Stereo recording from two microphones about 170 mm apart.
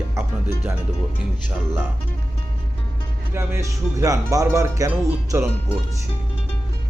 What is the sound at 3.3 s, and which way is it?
Speech, 15° right (ahead or behind).